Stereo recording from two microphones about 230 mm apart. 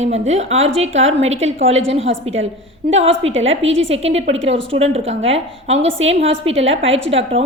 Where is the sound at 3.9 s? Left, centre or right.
Right.